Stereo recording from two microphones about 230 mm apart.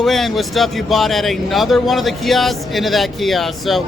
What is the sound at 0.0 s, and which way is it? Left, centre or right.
Speech, centre.